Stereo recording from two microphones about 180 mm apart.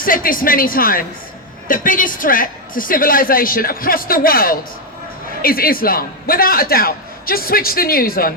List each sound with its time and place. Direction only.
0.0 s a woman's voice: 50° left (ahead or behind)